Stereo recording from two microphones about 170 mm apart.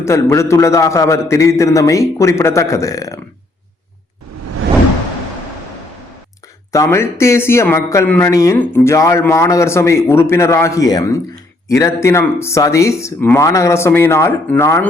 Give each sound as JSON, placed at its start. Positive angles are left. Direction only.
{"t": 0.0, "sound": "speech", "side_deg": 15}
{"t": 6.7, "sound": "speech", "side_deg": 15}